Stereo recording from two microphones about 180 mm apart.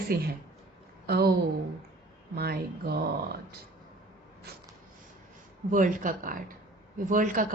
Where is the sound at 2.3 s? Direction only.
60° right (ahead or behind).